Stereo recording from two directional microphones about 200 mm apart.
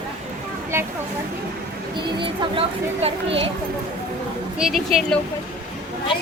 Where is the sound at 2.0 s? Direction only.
25° right (ahead or behind).